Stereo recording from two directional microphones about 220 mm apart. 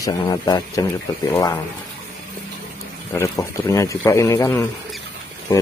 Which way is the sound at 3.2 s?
15° left (ahead or behind).